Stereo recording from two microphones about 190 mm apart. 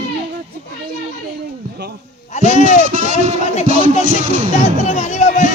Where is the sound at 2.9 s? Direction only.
40° right (ahead or behind).